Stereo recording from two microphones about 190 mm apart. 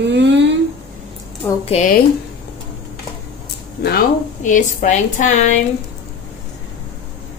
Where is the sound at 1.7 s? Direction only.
35° left (ahead or behind).